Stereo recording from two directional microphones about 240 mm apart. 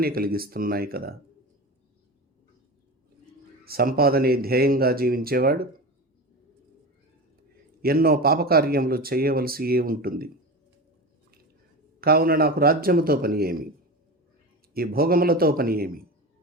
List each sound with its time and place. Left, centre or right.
0.0 s a man's voice: right
3.6 s a man's voice: right
7.8 s a man's voice: right
11.9 s a man's voice: right
14.7 s a man's voice: right